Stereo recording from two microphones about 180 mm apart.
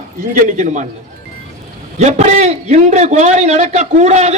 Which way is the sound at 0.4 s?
40° right (ahead or behind).